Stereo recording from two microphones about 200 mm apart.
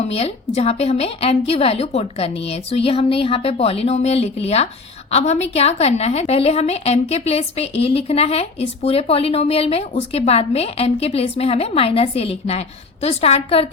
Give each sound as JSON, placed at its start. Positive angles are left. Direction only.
{"t": 0.0, "sound": "a woman's voice", "side_deg": 30}